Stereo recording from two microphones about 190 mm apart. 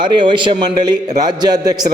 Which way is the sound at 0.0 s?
25° right (ahead or behind).